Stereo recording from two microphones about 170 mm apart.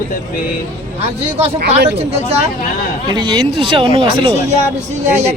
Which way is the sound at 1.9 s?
40° right (ahead or behind).